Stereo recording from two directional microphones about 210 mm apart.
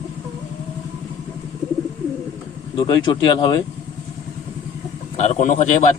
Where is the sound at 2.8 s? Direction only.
20° left (ahead or behind).